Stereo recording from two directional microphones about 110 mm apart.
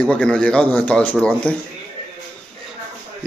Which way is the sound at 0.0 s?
10° left (ahead or behind).